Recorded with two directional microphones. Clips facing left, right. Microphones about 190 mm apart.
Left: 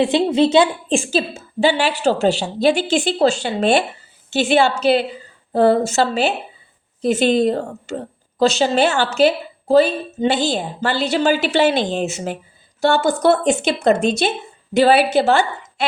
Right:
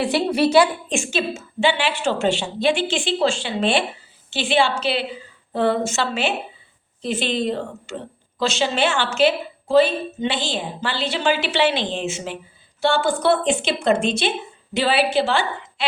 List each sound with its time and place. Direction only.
0.0 s a woman's voice: 20° left (ahead or behind); by 15.9 s 45° left (ahead or behind)